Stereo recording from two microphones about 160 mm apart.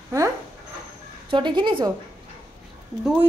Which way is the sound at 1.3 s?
30° right (ahead or behind).